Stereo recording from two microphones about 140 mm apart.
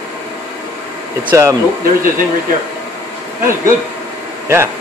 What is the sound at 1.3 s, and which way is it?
Speech, 20° right (ahead or behind).